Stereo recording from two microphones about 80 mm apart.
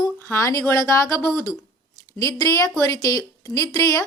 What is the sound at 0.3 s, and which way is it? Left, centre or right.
A woman's voice, left.